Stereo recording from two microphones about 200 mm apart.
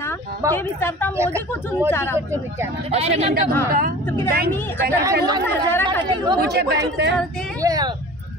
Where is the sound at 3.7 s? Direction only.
45° right (ahead or behind).